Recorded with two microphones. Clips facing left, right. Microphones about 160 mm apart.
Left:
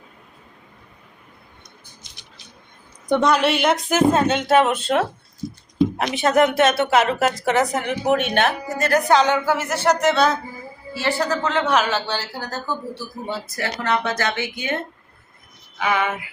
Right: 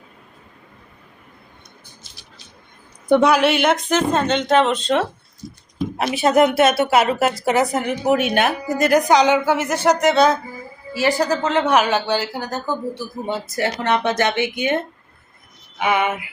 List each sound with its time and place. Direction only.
3.1 s speech: 5° right (ahead or behind)
6.1 s a woman's voice: 10° right (ahead or behind)
15.8 s a sound: 20° right (ahead or behind)